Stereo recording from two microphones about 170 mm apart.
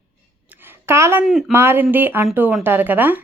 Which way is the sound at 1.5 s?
15° right (ahead or behind).